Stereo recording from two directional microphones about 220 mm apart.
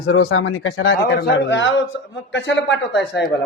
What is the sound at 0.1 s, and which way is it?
Speech, 70° left (ahead or behind).